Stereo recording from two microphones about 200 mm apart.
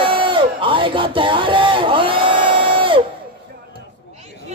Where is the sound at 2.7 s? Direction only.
25° right (ahead or behind).